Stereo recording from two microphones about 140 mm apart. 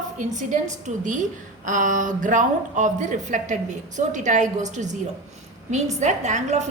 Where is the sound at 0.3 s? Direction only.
60° right (ahead or behind).